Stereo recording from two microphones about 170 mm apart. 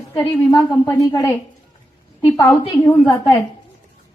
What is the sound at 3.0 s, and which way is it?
Speech, 25° left (ahead or behind).